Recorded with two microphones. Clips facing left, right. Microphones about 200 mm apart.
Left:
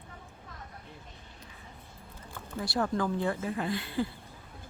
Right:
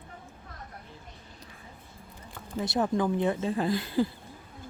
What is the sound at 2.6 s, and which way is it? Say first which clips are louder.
Speech: right 3 dB; 20° right (ahead or behind).